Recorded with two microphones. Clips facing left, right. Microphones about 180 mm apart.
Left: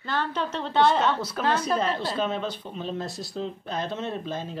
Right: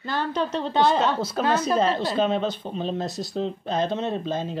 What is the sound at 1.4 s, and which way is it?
Speech, 30° right (ahead or behind).